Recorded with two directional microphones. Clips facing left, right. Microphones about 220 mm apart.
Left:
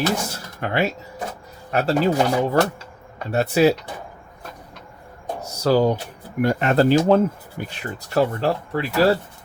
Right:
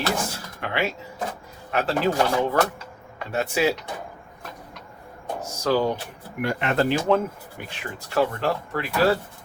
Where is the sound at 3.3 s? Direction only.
35° left (ahead or behind).